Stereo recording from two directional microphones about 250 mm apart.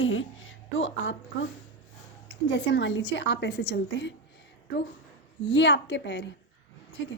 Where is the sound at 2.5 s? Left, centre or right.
Left.